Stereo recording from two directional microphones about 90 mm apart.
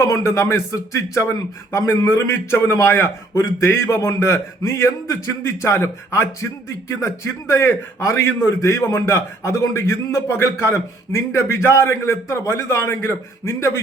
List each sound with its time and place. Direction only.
0.0 s a man's voice: 35° left (ahead or behind)